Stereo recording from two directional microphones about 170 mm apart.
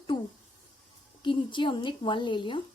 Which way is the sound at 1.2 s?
30° left (ahead or behind).